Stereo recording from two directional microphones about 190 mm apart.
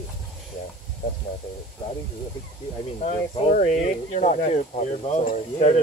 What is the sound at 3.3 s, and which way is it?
Speech, 40° left (ahead or behind).